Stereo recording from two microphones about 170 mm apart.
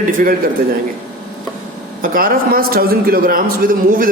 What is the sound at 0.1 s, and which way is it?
Speech, 55° right (ahead or behind).